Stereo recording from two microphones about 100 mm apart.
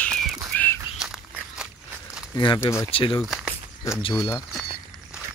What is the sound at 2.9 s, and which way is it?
Speech, 60° left (ahead or behind).